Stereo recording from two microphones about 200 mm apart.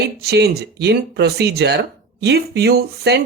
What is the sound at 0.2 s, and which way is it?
Speech, 55° right (ahead or behind).